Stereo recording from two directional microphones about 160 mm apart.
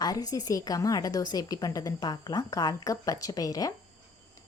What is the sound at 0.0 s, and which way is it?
A woman's voice, 25° left (ahead or behind).